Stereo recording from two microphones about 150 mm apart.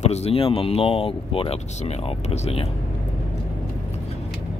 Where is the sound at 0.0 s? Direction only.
45° left (ahead or behind).